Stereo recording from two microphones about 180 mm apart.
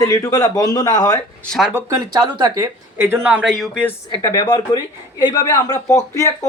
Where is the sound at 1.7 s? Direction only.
20° right (ahead or behind).